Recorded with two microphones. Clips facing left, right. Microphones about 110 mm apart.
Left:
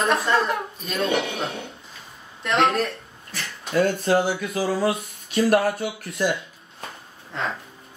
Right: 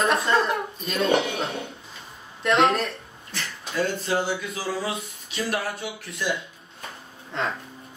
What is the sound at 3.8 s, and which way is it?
Speech, 50° left (ahead or behind).